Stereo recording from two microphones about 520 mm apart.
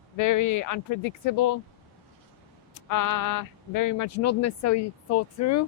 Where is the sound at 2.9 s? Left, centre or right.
Left.